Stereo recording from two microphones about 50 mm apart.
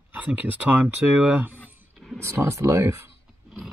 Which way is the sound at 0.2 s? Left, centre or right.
Right.